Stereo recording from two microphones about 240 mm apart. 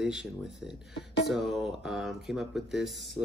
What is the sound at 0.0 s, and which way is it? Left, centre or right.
Speech, centre.